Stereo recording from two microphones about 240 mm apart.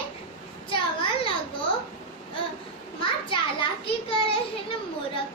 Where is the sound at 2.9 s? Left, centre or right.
Left.